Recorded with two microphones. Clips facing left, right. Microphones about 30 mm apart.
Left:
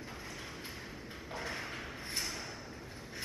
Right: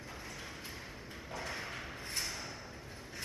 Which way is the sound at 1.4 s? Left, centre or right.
Centre.